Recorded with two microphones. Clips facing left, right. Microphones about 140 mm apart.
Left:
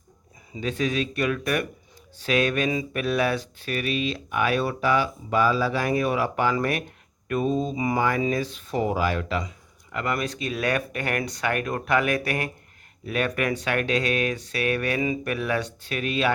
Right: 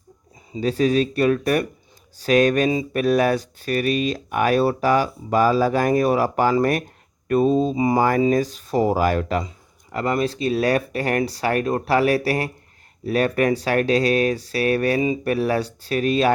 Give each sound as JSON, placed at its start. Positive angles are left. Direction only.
{"t": 0.5, "sound": "speech", "side_deg": -35}
{"t": 9.4, "sound": "speech", "side_deg": -30}